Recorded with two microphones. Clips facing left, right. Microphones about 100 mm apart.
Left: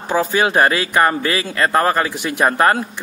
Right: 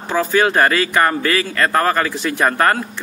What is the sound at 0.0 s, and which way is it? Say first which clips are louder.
A man's voice: right 1 dB; 15° left (ahead or behind).